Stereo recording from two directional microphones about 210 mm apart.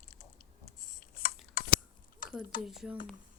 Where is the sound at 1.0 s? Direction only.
40° left (ahead or behind).